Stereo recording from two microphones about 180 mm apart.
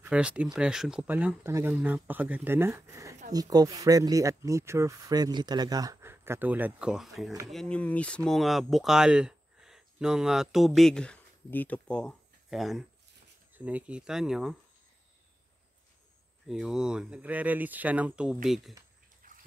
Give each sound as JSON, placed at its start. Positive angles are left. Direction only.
{"t": 0.0, "sound": "speech", "side_deg": -5}
{"t": 16.4, "sound": "speech", "side_deg": 0}
{"t": 19.2, "sound": "a sound", "side_deg": -50}